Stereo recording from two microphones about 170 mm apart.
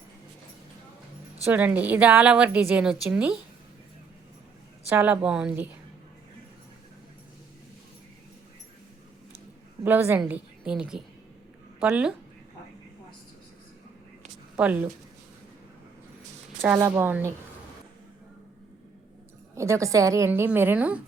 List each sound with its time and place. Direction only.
1.5 s a woman's voice: 10° right (ahead or behind)
4.9 s a woman's voice: 10° right (ahead or behind)
9.8 s a woman's voice: 10° right (ahead or behind)
14.5 s speech: 10° right (ahead or behind)
16.6 s a woman's voice: 10° right (ahead or behind)
19.5 s a woman's voice: 15° right (ahead or behind)